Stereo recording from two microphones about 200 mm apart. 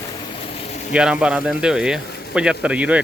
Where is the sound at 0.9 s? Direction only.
5° right (ahead or behind).